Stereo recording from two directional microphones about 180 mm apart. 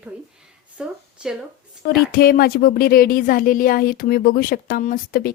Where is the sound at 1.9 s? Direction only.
55° left (ahead or behind).